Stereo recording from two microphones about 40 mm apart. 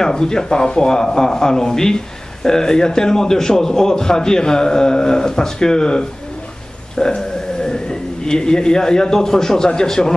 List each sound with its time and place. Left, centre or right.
0.0 s a man's voice: centre
7.2 s a man's voice: centre